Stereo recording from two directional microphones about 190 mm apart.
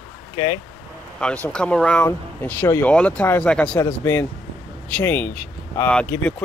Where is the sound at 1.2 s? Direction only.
5° left (ahead or behind).